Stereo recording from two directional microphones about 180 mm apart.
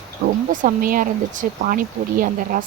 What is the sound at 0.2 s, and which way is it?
Speech, 65° right (ahead or behind).